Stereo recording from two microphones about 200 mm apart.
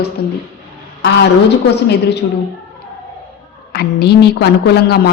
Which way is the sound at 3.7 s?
55° left (ahead or behind).